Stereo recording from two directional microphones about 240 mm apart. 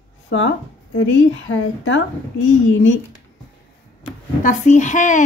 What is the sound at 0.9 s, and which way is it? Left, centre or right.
A woman's voice, left.